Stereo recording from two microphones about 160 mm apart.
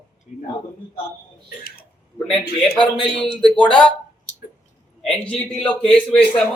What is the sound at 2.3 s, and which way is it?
Speech, 5° left (ahead or behind).